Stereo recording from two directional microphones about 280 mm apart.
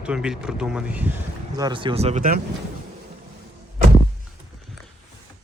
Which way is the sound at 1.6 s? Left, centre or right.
Centre.